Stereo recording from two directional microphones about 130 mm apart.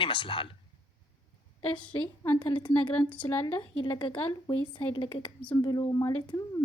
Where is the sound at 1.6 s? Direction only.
40° left (ahead or behind).